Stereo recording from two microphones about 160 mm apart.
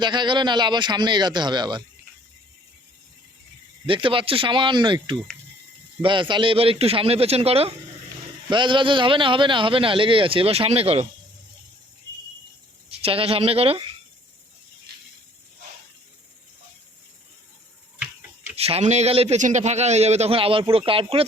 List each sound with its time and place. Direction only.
0.0 s speech: 30° right (ahead or behind)
3.8 s a man's voice: 35° right (ahead or behind)
13.0 s a man's voice: 35° right (ahead or behind)
18.5 s a man's voice: 40° right (ahead or behind)